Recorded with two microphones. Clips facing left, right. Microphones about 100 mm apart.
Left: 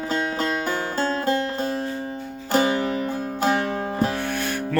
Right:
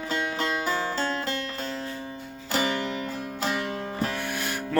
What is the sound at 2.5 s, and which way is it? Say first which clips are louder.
Music: left 6 dB; 40° left (ahead or behind).